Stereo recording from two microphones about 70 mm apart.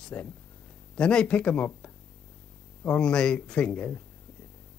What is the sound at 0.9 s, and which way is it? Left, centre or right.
Speech, centre.